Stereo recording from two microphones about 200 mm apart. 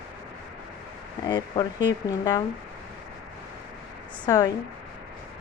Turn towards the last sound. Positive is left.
turn(degrees=20)  # may be behind; listen again after turning